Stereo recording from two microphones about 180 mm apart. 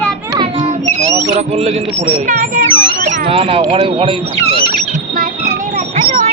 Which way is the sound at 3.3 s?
30° right (ahead or behind).